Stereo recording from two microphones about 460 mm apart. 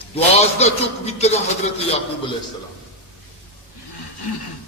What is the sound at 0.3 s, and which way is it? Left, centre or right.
A man's voice, centre.